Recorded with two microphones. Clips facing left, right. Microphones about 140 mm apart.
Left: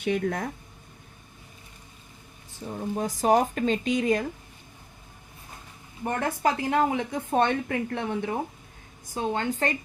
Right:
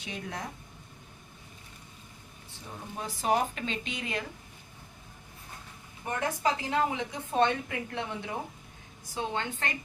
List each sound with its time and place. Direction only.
0.0 s speech: 55° left (ahead or behind)
2.9 s a woman's voice: 45° left (ahead or behind)
6.1 s a woman's voice: 50° left (ahead or behind)
9.1 s a woman's voice: 40° left (ahead or behind)